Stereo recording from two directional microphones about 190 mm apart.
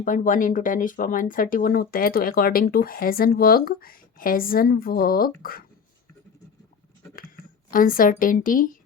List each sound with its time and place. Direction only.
0.0 s speech: 45° left (ahead or behind)
7.7 s speech: 45° left (ahead or behind)